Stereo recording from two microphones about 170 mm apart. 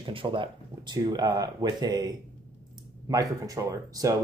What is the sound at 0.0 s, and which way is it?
Speech, 30° right (ahead or behind).